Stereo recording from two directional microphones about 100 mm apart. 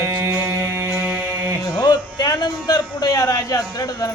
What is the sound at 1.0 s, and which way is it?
Music, 25° right (ahead or behind).